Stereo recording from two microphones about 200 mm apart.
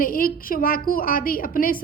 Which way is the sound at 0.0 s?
45° left (ahead or behind).